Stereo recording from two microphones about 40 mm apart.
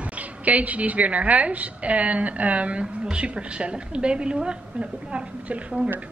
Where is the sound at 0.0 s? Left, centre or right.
Right.